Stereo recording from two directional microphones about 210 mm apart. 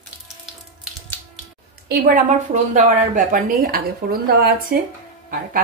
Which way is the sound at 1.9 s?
40° right (ahead or behind).